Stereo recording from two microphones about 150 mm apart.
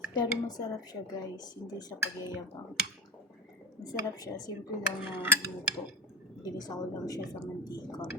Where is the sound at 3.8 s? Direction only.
25° left (ahead or behind).